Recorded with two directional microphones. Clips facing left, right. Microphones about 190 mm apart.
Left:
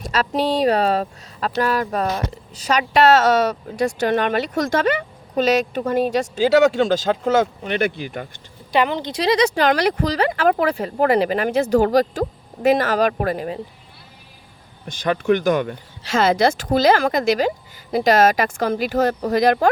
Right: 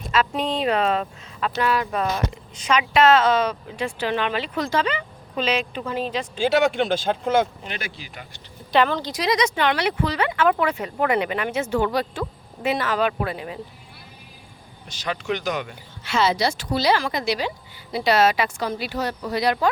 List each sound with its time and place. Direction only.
0.0 s speech: 35° left (ahead or behind)
7.8 s speech: 55° left (ahead or behind)
8.7 s speech: 15° left (ahead or behind); by 13.6 s 45° left (ahead or behind)
14.8 s speech: 50° left (ahead or behind)